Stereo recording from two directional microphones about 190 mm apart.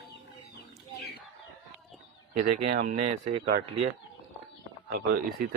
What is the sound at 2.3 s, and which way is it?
Speech, 45° right (ahead or behind).